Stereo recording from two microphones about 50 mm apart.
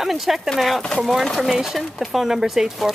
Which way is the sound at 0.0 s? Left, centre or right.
Centre.